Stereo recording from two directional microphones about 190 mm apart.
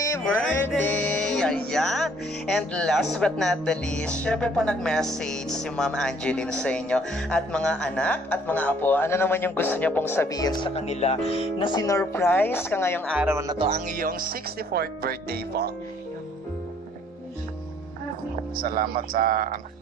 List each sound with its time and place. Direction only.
0.2 s music: 10° left (ahead or behind)
13.1 s speech: 10° right (ahead or behind)
13.6 s speech: 35° right (ahead or behind); by 15.7 s 55° right (ahead or behind)
18.6 s speech: 50° right (ahead or behind)